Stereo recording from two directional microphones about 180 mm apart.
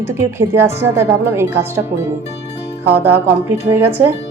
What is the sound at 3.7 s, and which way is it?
Speech, 10° right (ahead or behind).